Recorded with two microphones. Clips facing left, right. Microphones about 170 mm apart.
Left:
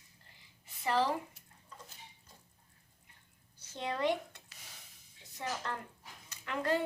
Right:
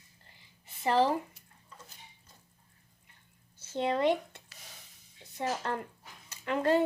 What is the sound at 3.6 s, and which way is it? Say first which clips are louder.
A woman's voice: right 7 dB; 25° right (ahead or behind).